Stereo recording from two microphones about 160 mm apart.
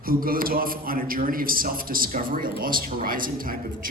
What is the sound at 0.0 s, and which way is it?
A man's voice, 65° right (ahead or behind).